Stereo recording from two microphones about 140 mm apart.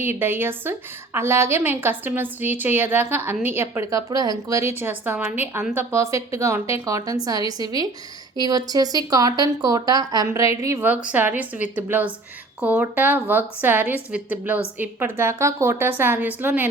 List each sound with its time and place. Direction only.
0.0 s a woman's voice: 15° right (ahead or behind)